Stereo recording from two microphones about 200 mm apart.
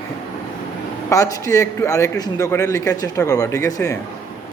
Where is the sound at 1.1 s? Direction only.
15° left (ahead or behind).